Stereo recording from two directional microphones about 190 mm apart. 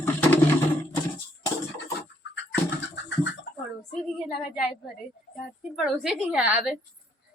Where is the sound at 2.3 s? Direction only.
70° left (ahead or behind).